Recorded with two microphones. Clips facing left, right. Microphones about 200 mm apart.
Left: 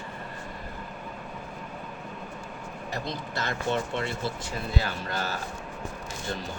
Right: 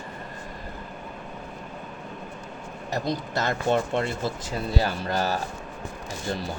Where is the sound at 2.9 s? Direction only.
45° right (ahead or behind).